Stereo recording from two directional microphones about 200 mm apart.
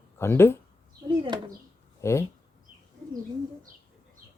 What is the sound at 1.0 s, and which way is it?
Speech, 20° right (ahead or behind).